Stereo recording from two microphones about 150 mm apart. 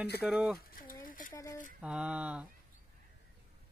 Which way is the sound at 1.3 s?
25° left (ahead or behind).